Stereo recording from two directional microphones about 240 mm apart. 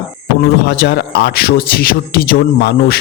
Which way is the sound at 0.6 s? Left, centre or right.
Left.